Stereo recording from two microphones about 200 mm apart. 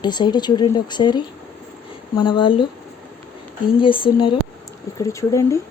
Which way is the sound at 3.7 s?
25° left (ahead or behind).